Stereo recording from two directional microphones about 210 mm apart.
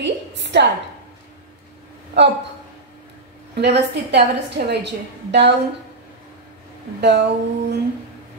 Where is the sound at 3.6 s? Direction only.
55° right (ahead or behind).